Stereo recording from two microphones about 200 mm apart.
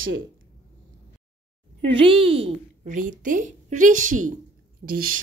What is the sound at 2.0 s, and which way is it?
A woman's voice, 25° right (ahead or behind).